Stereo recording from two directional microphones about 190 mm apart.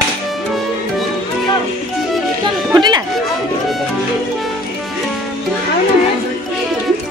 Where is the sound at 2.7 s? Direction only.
20° right (ahead or behind).